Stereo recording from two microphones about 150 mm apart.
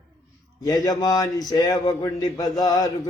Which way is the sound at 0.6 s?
25° left (ahead or behind).